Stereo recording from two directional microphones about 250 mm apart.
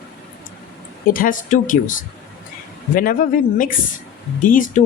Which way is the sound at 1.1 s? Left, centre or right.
Left.